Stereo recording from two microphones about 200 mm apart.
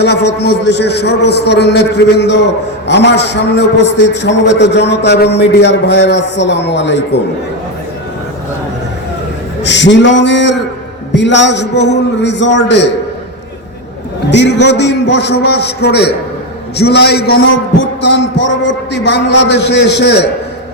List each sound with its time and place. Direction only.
0.0 s a man's voice: 60° left (ahead or behind)
9.6 s a man's voice: 65° left (ahead or behind)
14.3 s a man's voice: 60° left (ahead or behind)